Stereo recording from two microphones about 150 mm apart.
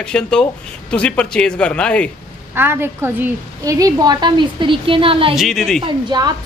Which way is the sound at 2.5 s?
15° right (ahead or behind).